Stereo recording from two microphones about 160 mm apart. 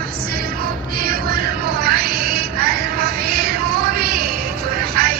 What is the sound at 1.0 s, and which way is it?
Music, 75° right (ahead or behind).